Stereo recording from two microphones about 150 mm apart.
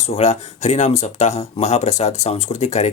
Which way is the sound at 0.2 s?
50° left (ahead or behind).